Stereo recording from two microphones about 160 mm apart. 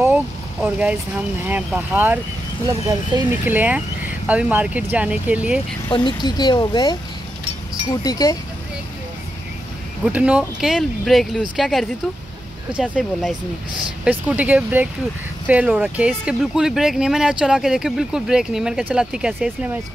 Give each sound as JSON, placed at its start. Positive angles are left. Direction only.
{"t": 0.0, "sound": "vehicle", "side_deg": -10}
{"t": 1.7, "sound": "speech", "side_deg": -10}
{"t": 2.6, "sound": "speech", "side_deg": -25}
{"t": 3.4, "sound": "speech", "side_deg": -10}
{"t": 5.9, "sound": "speech", "side_deg": 30}
{"t": 8.0, "sound": "speech", "side_deg": 20}
{"t": 10.0, "sound": "speech", "side_deg": -10}